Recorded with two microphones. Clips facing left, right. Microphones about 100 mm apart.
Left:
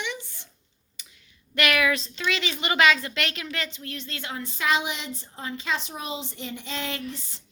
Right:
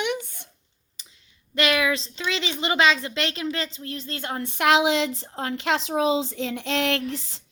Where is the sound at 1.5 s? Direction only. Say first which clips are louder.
Right 1 dB; 25° right (ahead or behind); by 6.0 s 90° right.